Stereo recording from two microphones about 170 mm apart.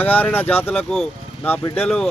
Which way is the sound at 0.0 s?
10° left (ahead or behind).